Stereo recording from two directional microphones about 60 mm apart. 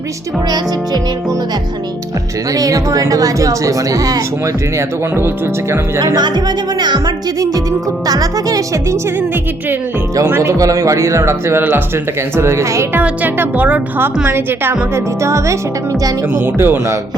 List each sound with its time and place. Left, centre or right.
2.5 s a woman's voice: right
8.0 s speech: right
10.4 s a man's voice: right
12.9 s speech: right
14.3 s a woman's voice: right
15.2 s speech: right
16.3 s a woman's voice: right